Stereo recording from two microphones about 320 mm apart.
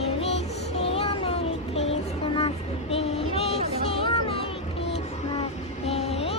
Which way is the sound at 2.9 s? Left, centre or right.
Centre.